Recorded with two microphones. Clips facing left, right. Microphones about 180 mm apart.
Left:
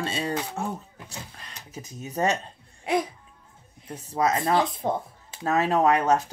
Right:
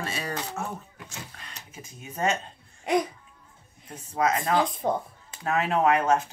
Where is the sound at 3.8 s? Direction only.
35° left (ahead or behind).